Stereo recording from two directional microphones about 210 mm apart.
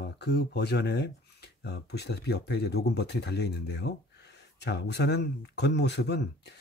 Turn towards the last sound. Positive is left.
turn(degrees=55)  # may be behind; listen again after turning